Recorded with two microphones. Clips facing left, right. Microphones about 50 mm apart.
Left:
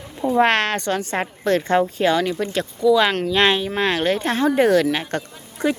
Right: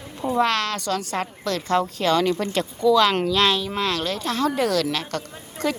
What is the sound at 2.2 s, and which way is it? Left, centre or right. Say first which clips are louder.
Speech: even; centre.